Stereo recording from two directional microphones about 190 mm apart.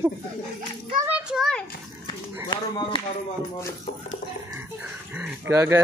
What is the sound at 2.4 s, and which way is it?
Speech, 25° left (ahead or behind).